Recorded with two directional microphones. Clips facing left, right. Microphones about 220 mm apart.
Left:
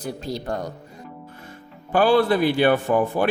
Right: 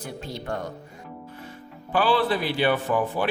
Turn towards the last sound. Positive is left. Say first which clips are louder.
# left 4 dB
turn(degrees=45)  # may be behind; listen again after turning